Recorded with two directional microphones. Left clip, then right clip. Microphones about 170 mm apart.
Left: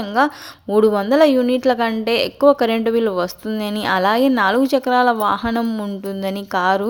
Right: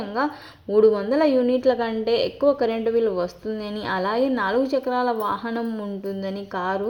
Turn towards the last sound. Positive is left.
turn(degrees=25)  # may be behind; listen again after turning